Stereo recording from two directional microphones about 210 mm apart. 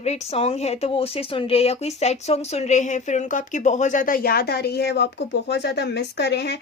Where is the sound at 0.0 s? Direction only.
30° left (ahead or behind).